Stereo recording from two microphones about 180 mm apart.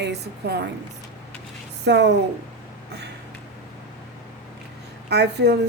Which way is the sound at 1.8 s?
70° right (ahead or behind).